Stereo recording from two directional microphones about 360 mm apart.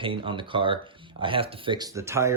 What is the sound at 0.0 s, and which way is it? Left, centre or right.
Speech, centre.